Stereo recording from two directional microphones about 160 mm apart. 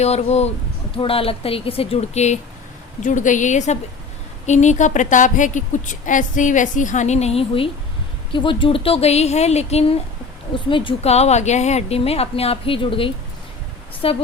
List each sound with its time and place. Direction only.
0.0 s a woman's voice: 40° left (ahead or behind)
10.7 s a woman's voice: 30° left (ahead or behind)